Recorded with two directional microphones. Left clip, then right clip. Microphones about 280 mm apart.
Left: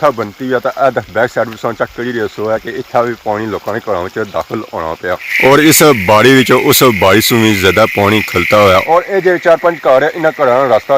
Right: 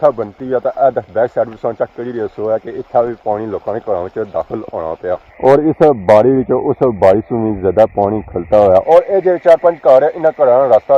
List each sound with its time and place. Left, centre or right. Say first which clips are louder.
0.0 s speech: left 1 dB; left